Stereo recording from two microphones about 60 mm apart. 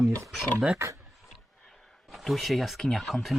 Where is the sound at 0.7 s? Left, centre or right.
Right.